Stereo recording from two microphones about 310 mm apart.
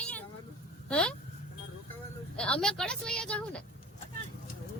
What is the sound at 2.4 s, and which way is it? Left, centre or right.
A woman's voice, centre.